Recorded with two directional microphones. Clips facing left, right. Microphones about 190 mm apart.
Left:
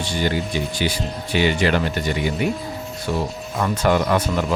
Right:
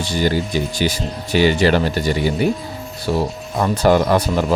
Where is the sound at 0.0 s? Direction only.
40° right (ahead or behind).